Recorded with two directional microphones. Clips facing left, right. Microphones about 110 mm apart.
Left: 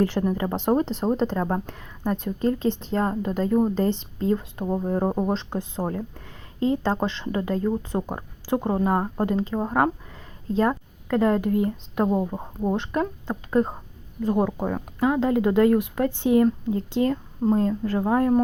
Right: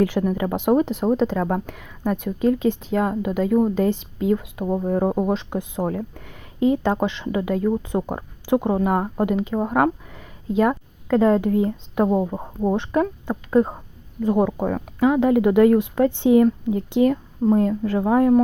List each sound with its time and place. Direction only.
0.2 s speech: centre (ahead or behind)
4.8 s speech: 5° left (ahead or behind)
5.1 s speech: 10° right (ahead or behind)
6.2 s speech: 15° right (ahead or behind)
15.0 s speech: 15° right (ahead or behind)